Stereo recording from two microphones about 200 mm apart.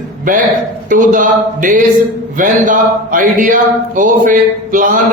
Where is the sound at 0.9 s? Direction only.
40° right (ahead or behind).